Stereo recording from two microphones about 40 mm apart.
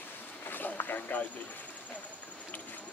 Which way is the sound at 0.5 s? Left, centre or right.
Left.